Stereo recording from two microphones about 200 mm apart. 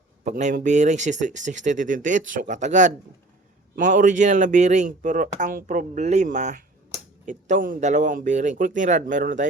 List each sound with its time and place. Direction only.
0.3 s speech: 35° right (ahead or behind)